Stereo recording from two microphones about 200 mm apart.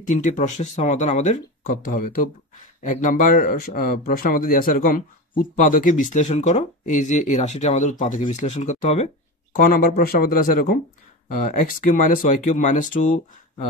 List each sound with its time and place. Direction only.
0.0 s speech: 40° left (ahead or behind)